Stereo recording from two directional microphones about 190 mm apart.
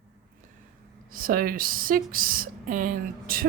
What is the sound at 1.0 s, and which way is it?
Speech, 45° right (ahead or behind).